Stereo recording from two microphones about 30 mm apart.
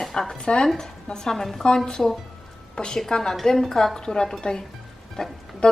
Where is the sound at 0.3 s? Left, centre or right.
Left.